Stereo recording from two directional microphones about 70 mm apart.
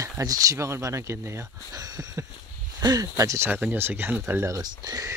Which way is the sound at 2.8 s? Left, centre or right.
Right.